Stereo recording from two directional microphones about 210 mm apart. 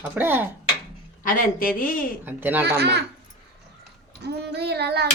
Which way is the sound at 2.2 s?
10° right (ahead or behind).